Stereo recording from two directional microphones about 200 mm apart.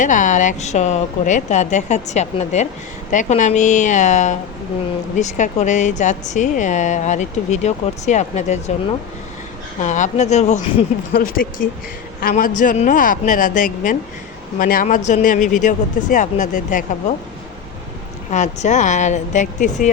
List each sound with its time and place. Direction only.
0.0 s speech: 40° left (ahead or behind)
11.1 s speech: 45° left (ahead or behind)
18.3 s speech: 35° left (ahead or behind)